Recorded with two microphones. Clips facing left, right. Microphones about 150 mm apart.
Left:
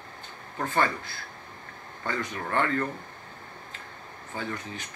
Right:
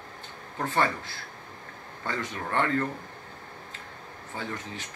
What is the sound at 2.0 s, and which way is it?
Speech, 25° right (ahead or behind).